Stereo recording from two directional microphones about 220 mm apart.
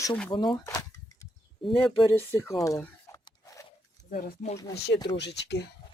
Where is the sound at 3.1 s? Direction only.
15° left (ahead or behind).